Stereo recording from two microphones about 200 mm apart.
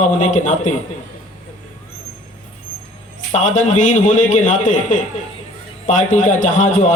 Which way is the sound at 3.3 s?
35° left (ahead or behind).